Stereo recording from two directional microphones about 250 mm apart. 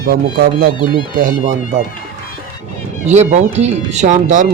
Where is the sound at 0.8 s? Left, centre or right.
Centre.